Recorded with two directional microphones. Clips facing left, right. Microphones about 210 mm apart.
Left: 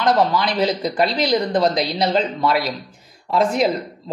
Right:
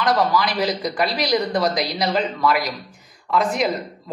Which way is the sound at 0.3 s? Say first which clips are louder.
Left 1 dB; 25° left (ahead or behind).